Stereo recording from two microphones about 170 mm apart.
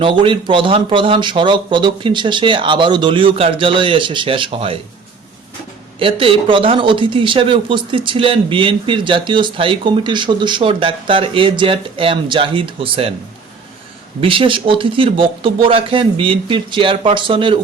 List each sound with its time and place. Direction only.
0.0 s speech: 30° right (ahead or behind)
6.0 s speech: 30° right (ahead or behind)
14.2 s speech: 30° right (ahead or behind)